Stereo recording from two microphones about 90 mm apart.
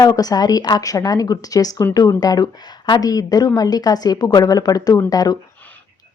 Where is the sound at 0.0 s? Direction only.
45° left (ahead or behind).